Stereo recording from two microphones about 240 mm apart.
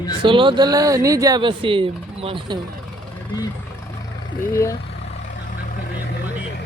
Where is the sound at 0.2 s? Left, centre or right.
Right.